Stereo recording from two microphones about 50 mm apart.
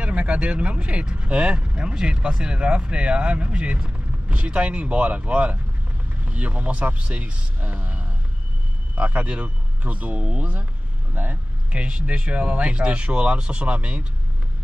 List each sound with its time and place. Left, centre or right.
0.0 s speech: right
11.7 s speech: right